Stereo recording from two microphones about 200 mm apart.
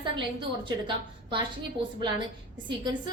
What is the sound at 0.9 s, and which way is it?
Speech, 25° right (ahead or behind).